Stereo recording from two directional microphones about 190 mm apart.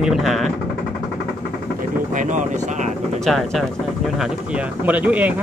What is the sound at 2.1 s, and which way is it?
Speech, 40° right (ahead or behind).